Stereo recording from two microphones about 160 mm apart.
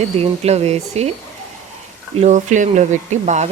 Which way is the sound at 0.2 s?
40° right (ahead or behind).